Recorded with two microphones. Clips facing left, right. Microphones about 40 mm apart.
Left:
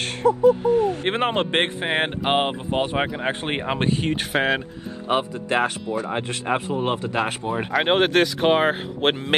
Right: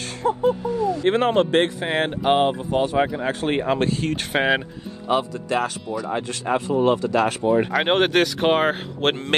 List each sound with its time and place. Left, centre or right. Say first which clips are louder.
0.3 s a sound: left 4 dB; right
0.7 s owl: left 1 dB; left
1.1 s speech: right 3 dB; left
4.3 s speech: right 3 dB; centre
5.0 s speech: right 1 dB; left
6.5 s speech: right 1 dB; centre
6.8 s speech: right 5 dB; left
7.4 s speech: right 3 dB; centre